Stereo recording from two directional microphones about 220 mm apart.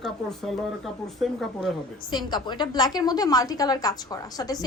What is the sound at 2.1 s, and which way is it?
A woman's voice, 20° left (ahead or behind).